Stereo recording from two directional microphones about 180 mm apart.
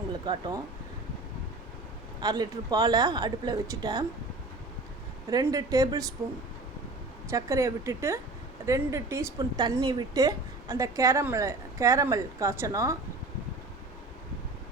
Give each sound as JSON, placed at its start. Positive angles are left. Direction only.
{"t": 0.3, "sound": "speech", "side_deg": -25}
{"t": 2.2, "sound": "speech", "side_deg": -20}
{"t": 5.3, "sound": "speech", "side_deg": -20}
{"t": 7.3, "sound": "a woman's voice", "side_deg": -15}